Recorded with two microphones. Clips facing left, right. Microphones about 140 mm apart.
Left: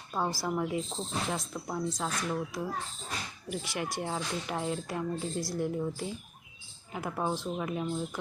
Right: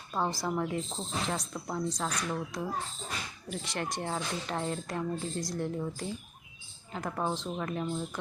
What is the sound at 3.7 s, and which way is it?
Speech, 10° left (ahead or behind).